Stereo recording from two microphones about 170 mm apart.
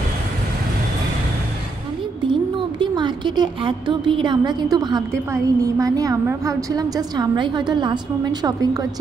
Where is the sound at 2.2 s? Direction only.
30° right (ahead or behind).